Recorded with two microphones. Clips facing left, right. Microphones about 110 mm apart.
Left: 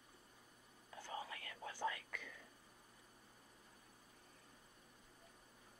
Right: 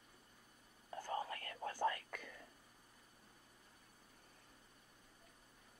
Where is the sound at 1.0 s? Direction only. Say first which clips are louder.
Right 6 dB; 45° right (ahead or behind).